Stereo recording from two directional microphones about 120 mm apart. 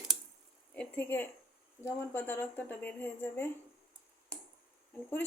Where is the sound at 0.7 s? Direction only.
15° left (ahead or behind).